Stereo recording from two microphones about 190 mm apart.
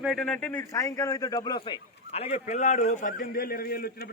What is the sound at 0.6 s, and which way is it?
A man's voice, 15° left (ahead or behind).